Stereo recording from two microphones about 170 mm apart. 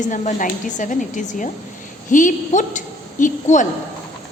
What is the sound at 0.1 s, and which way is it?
Speech, 50° left (ahead or behind).